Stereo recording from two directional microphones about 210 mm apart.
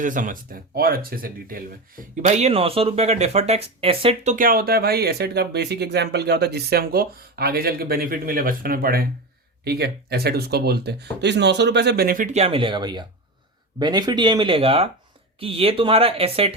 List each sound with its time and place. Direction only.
0.0 s speech: 40° right (ahead or behind)